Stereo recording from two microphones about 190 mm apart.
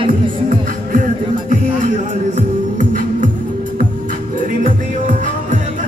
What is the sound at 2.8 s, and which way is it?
Music, 45° right (ahead or behind).